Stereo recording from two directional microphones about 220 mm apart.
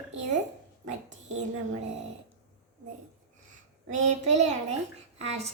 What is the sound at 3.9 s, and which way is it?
Child singing, 35° right (ahead or behind).